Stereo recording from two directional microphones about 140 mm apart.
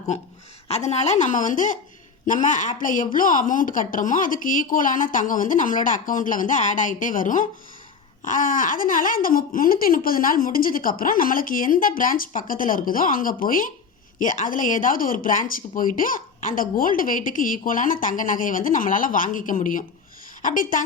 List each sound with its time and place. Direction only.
0.7 s a woman's voice: 50° left (ahead or behind); by 20.8 s 75° left (ahead or behind)